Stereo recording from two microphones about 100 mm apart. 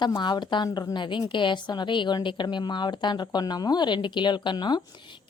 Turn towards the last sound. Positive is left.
turn(degrees=45)  # may be behind; listen again after turning